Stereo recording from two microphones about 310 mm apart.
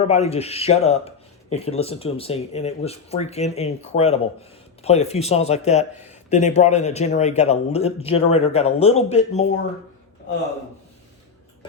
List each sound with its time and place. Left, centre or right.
0.1 s speech: left